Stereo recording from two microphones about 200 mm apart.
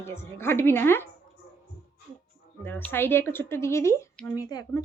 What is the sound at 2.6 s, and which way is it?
Speech, 10° left (ahead or behind).